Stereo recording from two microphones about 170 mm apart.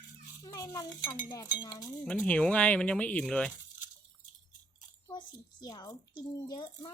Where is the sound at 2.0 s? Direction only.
5° left (ahead or behind).